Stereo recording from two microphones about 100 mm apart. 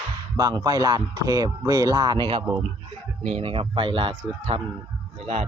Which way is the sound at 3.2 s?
80° right.